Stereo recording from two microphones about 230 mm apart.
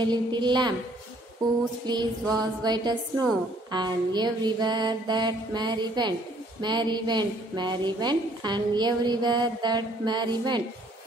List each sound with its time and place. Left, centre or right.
0.0 s a woman's voice: centre
1.9 s a woman's voice: centre
2.3 s a sound: centre
3.7 s a woman's voice: centre